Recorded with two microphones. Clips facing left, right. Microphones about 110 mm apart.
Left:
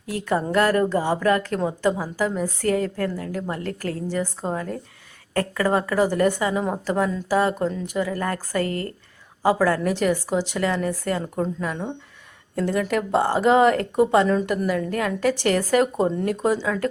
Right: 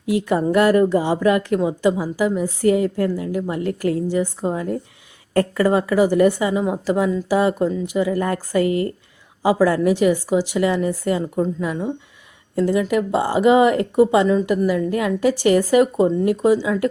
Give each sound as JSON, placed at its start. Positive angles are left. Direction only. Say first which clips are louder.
{"t": 0.0, "sound": "a woman's voice", "louder": "right 5 dB", "side_deg": -15}
{"t": 5.6, "sound": "a woman's voice", "louder": "right 3 dB", "side_deg": -10}